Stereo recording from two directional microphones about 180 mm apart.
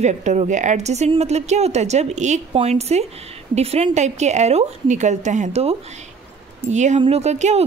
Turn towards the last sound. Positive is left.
turn(degrees=-35)  # may be behind; listen again after turning